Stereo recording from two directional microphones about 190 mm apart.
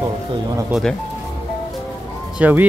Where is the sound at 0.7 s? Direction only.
Centre (ahead or behind).